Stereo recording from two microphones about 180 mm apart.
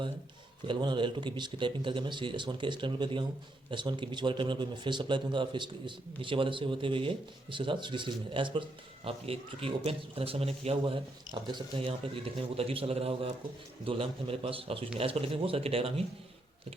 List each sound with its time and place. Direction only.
0.7 s a man's voice: 25° right (ahead or behind)